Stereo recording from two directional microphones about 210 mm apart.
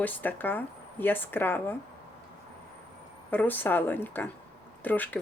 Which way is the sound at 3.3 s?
10° left (ahead or behind).